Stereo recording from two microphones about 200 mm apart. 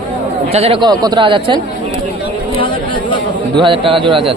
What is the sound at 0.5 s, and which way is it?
Speech, 30° right (ahead or behind).